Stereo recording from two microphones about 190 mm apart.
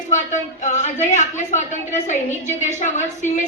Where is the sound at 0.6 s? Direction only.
40° left (ahead or behind).